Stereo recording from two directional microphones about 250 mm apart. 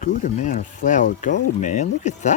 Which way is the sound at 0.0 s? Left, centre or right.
Left.